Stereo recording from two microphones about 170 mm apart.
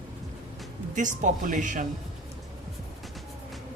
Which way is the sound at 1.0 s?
50° right (ahead or behind).